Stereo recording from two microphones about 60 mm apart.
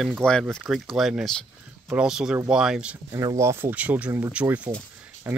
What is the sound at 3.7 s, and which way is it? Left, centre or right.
Speech, right.